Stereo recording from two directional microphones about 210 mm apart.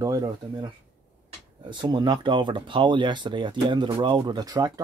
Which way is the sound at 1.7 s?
20° right (ahead or behind).